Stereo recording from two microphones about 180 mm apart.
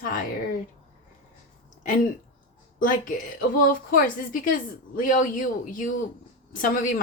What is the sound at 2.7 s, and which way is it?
A woman's voice, 50° left (ahead or behind).